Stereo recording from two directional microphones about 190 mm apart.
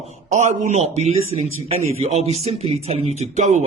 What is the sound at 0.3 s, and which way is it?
Speech, 40° right (ahead or behind).